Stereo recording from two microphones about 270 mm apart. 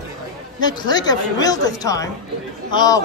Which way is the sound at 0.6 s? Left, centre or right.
Centre.